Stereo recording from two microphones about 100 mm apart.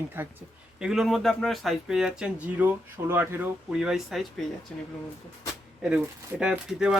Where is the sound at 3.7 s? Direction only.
5° right (ahead or behind); by 4.8 s 10° left (ahead or behind).